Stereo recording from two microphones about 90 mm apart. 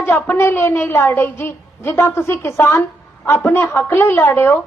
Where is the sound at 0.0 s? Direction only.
25° left (ahead or behind).